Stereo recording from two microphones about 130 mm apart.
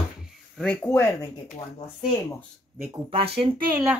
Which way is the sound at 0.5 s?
10° left (ahead or behind).